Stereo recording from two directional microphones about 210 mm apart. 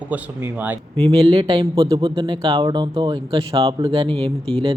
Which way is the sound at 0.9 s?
25° right (ahead or behind).